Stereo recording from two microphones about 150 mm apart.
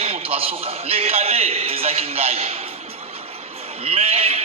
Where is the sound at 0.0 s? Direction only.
40° right (ahead or behind).